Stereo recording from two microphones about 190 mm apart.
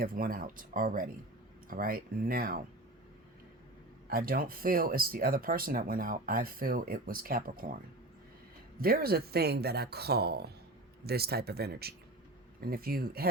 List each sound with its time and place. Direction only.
0.0 s speech: 50° right (ahead or behind)
4.1 s speech: 50° right (ahead or behind)
8.8 s speech: 50° right (ahead or behind)